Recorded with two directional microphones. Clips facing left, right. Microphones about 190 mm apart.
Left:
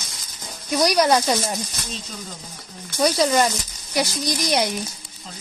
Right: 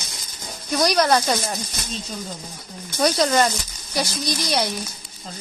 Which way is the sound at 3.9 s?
15° left (ahead or behind).